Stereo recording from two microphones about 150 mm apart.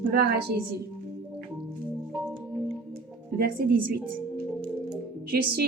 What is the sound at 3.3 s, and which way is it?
Speech, 80° right.